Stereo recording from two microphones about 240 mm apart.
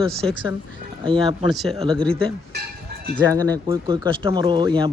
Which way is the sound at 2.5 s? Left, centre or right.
Right.